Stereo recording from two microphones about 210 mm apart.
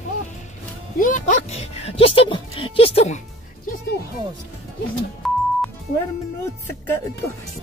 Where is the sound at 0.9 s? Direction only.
40° left (ahead or behind).